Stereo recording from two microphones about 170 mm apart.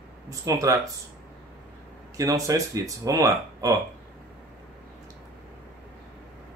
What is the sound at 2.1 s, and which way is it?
A man's voice, 20° right (ahead or behind).